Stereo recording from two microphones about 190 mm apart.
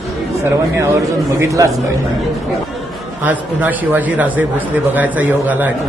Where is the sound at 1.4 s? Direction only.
15° right (ahead or behind).